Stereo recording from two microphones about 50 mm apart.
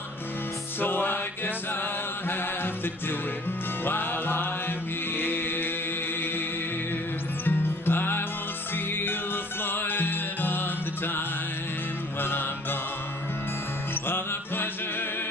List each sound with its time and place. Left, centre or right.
0.7 s music: left
7.4 s music: left
12.2 s music: left
14.0 s music: left